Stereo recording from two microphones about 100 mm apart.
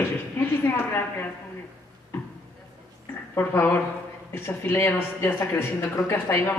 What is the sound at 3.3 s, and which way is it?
A woman's voice, 20° left (ahead or behind).